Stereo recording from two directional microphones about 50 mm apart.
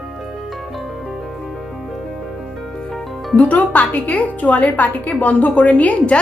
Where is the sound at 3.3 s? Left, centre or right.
Left.